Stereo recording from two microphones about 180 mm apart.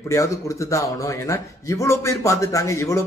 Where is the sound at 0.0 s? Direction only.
15° left (ahead or behind).